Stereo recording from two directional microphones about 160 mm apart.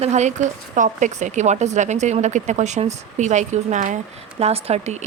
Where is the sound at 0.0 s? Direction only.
45° right (ahead or behind).